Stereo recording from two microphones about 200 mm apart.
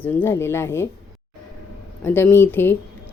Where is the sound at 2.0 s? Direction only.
10° left (ahead or behind).